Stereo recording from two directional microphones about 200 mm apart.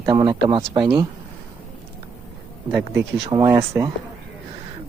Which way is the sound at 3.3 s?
15° right (ahead or behind).